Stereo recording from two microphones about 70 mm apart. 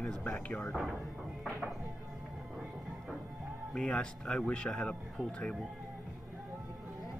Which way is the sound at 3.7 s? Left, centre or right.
Centre.